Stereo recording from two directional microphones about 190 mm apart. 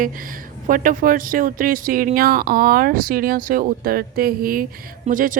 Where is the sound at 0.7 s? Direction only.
45° right (ahead or behind).